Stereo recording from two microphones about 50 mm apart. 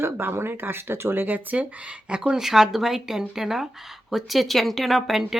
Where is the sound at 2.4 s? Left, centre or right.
Centre.